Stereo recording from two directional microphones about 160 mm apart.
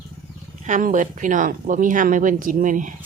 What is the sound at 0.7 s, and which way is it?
Speech, 55° right (ahead or behind).